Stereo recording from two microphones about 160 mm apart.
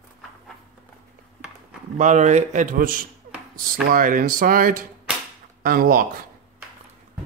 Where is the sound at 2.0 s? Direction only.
50° right (ahead or behind).